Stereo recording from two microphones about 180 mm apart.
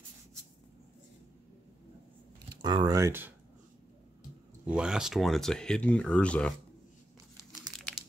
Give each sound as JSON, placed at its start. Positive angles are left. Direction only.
{"t": 2.6, "sound": "speech", "side_deg": -25}
{"t": 4.6, "sound": "speech", "side_deg": -5}